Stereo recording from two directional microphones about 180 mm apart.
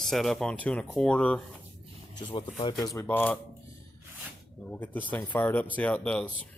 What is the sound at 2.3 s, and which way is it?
Speech, 30° left (ahead or behind).